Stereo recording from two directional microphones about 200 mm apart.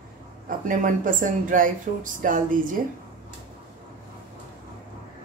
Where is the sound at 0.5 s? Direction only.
40° right (ahead or behind).